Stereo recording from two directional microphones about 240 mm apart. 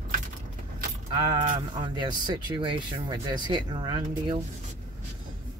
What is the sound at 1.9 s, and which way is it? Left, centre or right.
Speech, centre.